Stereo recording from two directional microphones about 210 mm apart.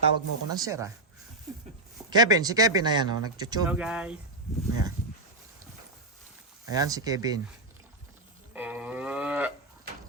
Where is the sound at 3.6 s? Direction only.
5° right (ahead or behind).